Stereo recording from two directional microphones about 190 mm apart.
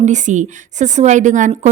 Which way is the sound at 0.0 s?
40° right (ahead or behind).